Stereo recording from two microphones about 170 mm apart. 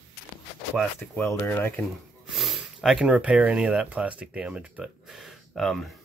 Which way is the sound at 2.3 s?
Centre (ahead or behind).